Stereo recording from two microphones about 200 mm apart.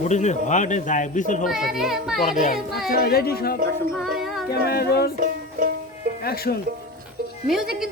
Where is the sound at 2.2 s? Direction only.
40° left (ahead or behind).